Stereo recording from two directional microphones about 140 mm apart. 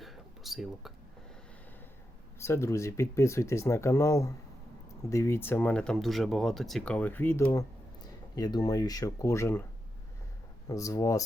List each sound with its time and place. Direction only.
0.0 s a sound: centre (ahead or behind)
2.4 s speech: 20° left (ahead or behind)
8.4 s speech: 30° left (ahead or behind)
10.7 s speech: 25° left (ahead or behind)